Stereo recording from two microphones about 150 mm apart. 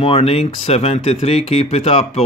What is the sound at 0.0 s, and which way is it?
Speech, 40° left (ahead or behind).